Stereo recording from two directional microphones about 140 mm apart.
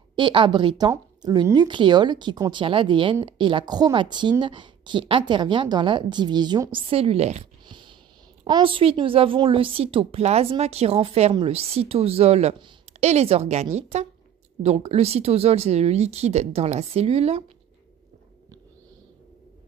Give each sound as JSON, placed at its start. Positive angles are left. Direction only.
{"t": 0.1, "sound": "a woman's voice", "side_deg": -35}
{"t": 7.6, "sound": "a sound", "side_deg": -35}
{"t": 8.5, "sound": "a woman's voice", "side_deg": -35}